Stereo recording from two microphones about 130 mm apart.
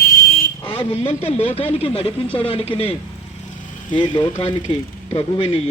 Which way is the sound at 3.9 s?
40° left (ahead or behind).